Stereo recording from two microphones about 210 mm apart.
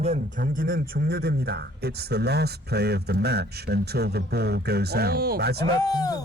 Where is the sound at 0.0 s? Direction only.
35° right (ahead or behind).